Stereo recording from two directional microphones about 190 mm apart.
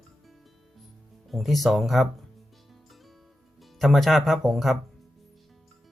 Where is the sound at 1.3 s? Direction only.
Centre (ahead or behind).